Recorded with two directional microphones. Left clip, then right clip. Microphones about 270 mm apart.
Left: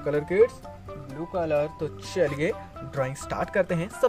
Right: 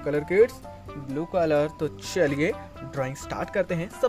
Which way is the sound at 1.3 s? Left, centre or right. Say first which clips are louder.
Right 2 dB; right.